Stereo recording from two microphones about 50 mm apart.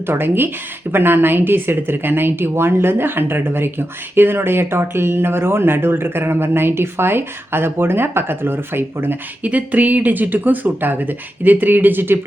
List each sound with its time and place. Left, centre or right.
0.0 s a woman's voice: right
9.4 s speech: right